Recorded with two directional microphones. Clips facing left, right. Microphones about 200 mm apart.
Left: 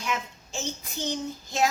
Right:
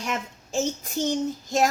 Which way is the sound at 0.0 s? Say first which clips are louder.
Right 1 dB; 40° right (ahead or behind).